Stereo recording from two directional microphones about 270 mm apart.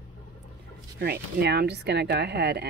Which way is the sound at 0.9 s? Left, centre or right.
Right.